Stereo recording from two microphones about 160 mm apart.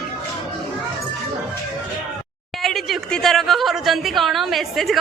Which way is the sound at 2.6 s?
Centre (ahead or behind).